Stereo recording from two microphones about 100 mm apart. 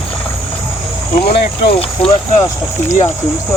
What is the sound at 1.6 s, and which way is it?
Speech, 65° left (ahead or behind).